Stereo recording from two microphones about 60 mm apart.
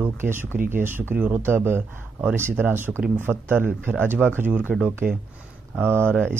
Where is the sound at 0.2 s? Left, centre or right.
Right.